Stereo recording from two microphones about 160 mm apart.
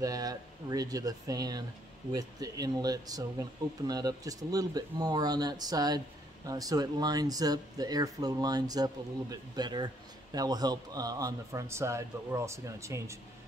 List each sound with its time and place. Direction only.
0.0 s speech: 25° right (ahead or behind)